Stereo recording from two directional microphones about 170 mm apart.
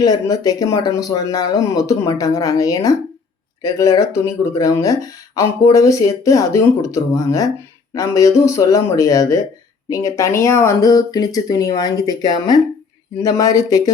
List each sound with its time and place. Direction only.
0.0 s speech: 20° left (ahead or behind)